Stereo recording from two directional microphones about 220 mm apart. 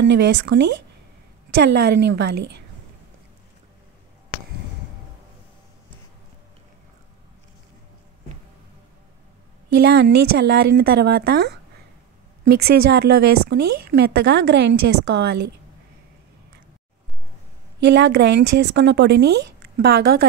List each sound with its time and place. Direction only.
0.0 s speech: 55° right (ahead or behind)
9.8 s speech: 45° right (ahead or behind)
12.5 s speech: 45° right (ahead or behind)
17.7 s speech: 55° right (ahead or behind)